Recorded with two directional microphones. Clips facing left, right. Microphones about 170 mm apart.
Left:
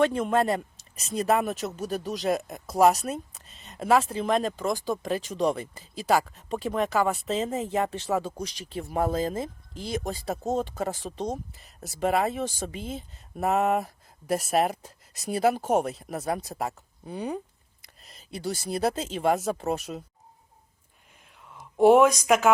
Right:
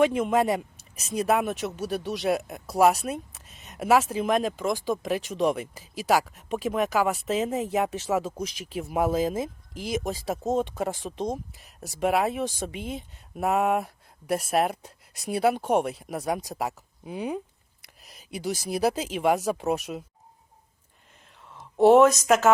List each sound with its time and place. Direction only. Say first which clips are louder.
0.0 s speech: right 1 dB; 5° right (ahead or behind)
21.5 s a sound: even; 5° right (ahead or behind)
21.8 s speech: right 1 dB; 10° left (ahead or behind)